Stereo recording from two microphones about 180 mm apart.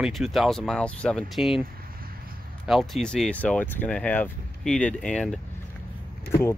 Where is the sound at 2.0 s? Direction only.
55° right (ahead or behind).